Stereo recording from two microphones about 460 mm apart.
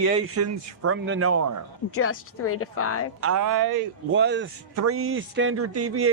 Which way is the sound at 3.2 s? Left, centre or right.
Right.